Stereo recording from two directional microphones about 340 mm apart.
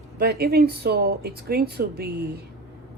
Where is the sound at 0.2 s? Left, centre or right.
Right.